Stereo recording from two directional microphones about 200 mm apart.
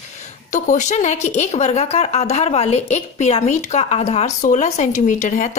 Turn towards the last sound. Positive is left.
turn(degrees=35)  # may be behind; listen again after turning